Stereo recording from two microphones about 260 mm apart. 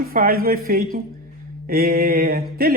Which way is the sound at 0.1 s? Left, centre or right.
Right.